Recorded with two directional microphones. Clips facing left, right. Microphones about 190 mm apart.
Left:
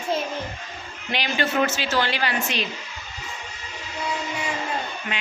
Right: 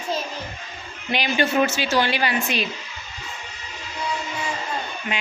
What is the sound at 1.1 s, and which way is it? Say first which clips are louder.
Speech: right 3 dB; 15° right (ahead or behind).